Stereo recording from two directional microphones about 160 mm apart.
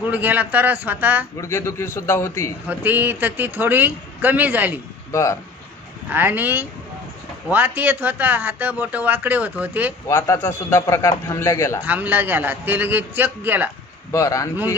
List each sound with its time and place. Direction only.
0.1 s a man's voice: 10° right (ahead or behind)
1.4 s a man's voice: 15° left (ahead or behind)
2.7 s a man's voice: 10° right (ahead or behind)
5.1 s a man's voice: 20° left (ahead or behind)
6.0 s a man's voice: 10° right (ahead or behind)
10.0 s a man's voice: 20° left (ahead or behind)
11.8 s a man's voice: 10° right (ahead or behind)
14.1 s a man's voice: 20° left (ahead or behind)